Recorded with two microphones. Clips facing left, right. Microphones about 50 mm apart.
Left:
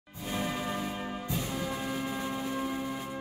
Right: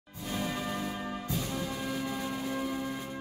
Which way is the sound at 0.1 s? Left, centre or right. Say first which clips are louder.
Left 1 dB; centre.